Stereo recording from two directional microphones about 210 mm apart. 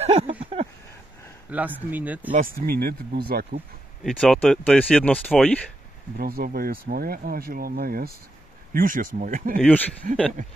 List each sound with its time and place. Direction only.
0.0 s a sound: 30° right (ahead or behind)
1.5 s speech: 10° right (ahead or behind)
2.3 s speech: 45° right (ahead or behind)
4.0 s speech: 5° left (ahead or behind)
6.1 s speech: 45° right (ahead or behind)
9.6 s speech: 10° left (ahead or behind)